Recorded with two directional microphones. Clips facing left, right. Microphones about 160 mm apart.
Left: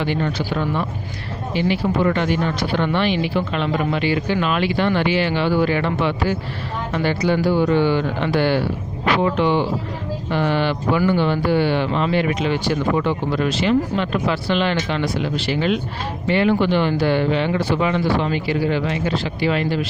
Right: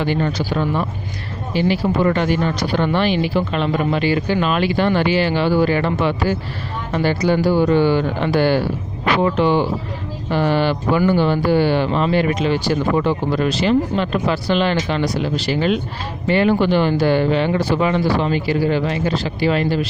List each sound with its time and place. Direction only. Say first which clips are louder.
0.0 s speech: right 2 dB; 40° right (ahead or behind)